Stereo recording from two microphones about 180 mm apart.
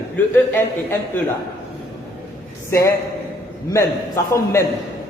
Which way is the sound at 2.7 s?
15° left (ahead or behind).